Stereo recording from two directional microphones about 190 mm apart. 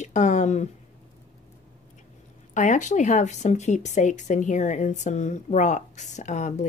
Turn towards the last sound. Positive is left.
turn(degrees=40)  # may be behind; listen again after turning